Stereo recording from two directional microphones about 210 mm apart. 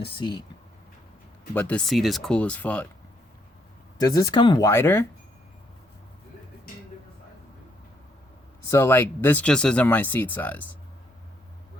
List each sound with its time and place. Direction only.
0.0 s speech: 20° left (ahead or behind)
1.5 s speech: 5° left (ahead or behind)
3.9 s speech: 15° left (ahead or behind)
8.7 s speech: 10° left (ahead or behind)